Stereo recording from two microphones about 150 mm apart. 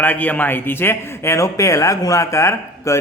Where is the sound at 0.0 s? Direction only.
10° left (ahead or behind).